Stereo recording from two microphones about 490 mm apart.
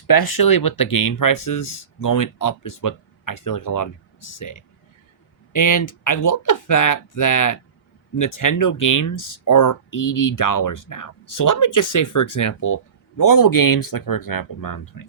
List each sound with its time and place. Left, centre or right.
0.1 s speech: left
5.5 s speech: left